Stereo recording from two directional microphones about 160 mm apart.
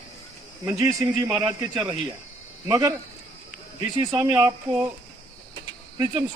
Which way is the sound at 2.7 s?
20° right (ahead or behind).